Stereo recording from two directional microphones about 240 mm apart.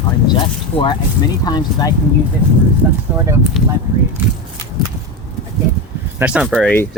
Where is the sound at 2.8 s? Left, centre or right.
Centre.